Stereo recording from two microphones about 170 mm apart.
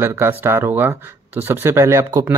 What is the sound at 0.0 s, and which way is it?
Speech, 10° right (ahead or behind).